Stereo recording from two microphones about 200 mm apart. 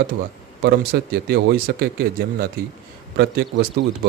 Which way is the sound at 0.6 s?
50° right (ahead or behind).